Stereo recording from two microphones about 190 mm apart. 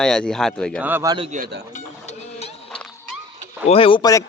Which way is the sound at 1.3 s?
45° right (ahead or behind).